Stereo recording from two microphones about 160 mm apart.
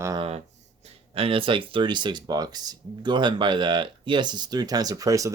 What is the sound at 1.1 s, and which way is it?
Speech, 35° right (ahead or behind).